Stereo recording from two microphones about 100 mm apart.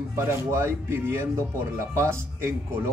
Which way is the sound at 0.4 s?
25° right (ahead or behind).